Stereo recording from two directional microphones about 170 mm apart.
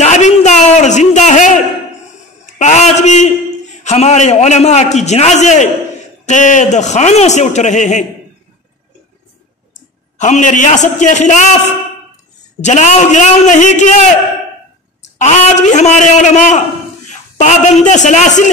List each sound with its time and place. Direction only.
0.0 s a sound: 45° left (ahead or behind)
3.8 s a man's voice: 40° left (ahead or behind)
9.8 s a man's voice: 45° left (ahead or behind)
12.6 s a man's voice: 45° left (ahead or behind)
15.1 s a man's voice: 45° left (ahead or behind)